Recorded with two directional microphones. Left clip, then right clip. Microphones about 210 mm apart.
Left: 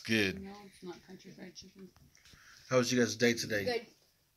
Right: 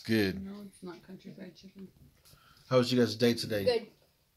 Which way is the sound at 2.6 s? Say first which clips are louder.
Right 3 dB; 15° right (ahead or behind).